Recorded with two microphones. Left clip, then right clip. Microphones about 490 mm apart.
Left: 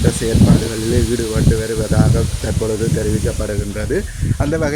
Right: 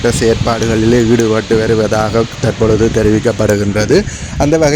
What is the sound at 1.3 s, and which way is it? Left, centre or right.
Speech, centre.